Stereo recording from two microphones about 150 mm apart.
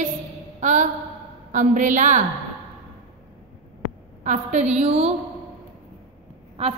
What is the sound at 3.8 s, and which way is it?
A woman's voice, 55° right (ahead or behind).